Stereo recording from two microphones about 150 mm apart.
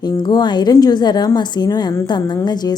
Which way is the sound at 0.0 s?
30° left (ahead or behind).